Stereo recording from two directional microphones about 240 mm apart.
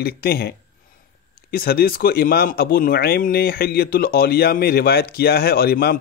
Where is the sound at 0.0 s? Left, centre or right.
Left.